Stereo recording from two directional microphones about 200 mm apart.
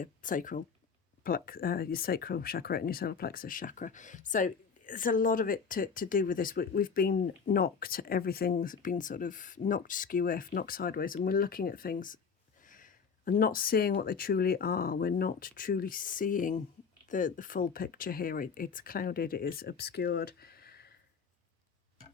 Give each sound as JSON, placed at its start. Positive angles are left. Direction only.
{"t": 0.0, "sound": "speech", "side_deg": 40}